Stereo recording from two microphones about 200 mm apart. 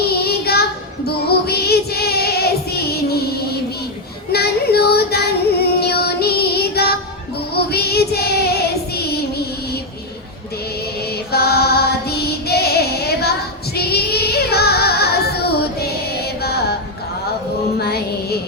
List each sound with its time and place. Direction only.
0.0 s child singing: 50° left (ahead or behind)
4.3 s female singing: 50° left (ahead or behind)
7.5 s child singing: 50° left (ahead or behind)
11.3 s female singing: 50° left (ahead or behind)
13.7 s singing: 50° left (ahead or behind)
16.4 s music: 50° left (ahead or behind)
17.7 s music: 55° left (ahead or behind)